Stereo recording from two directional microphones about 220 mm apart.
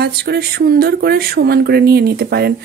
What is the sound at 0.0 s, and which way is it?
A woman's voice, 45° right (ahead or behind).